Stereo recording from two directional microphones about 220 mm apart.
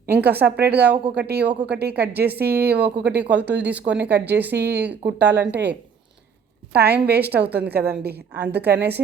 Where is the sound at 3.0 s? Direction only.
50° right (ahead or behind).